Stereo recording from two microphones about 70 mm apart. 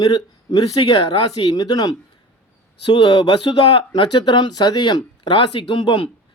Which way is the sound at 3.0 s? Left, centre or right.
Left.